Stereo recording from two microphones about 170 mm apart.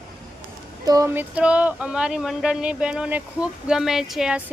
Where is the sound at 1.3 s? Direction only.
5° right (ahead or behind).